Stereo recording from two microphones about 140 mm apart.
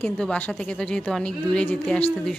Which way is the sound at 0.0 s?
10° left (ahead or behind).